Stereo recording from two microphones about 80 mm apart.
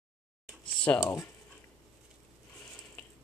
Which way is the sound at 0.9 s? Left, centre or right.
Left.